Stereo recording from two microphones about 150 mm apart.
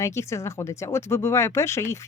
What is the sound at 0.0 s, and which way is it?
Speech, 20° left (ahead or behind).